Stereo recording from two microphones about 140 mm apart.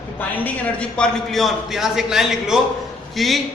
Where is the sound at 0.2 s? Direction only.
10° left (ahead or behind).